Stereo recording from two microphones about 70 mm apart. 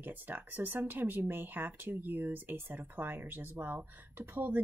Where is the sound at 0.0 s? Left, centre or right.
Right.